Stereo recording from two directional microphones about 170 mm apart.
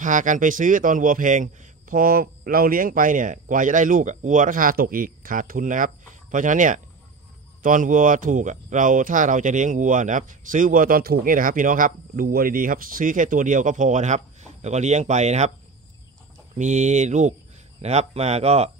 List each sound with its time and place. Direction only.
0.0 s speech: 50° right (ahead or behind)
16.5 s speech: 45° right (ahead or behind)